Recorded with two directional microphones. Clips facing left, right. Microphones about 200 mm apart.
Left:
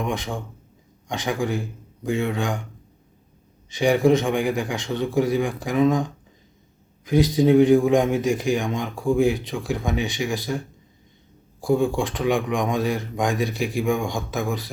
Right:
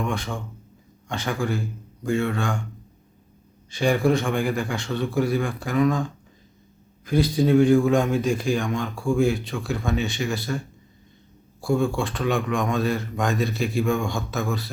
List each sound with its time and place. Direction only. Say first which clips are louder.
0.0 s a man's voice: left 1 dB; 15° left (ahead or behind)
3.7 s a man's voice: left 3 dB; 15° left (ahead or behind)
11.6 s a man's voice: left 2 dB; 15° left (ahead or behind)